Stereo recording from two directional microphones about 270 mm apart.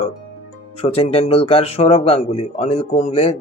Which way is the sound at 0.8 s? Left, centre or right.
Left.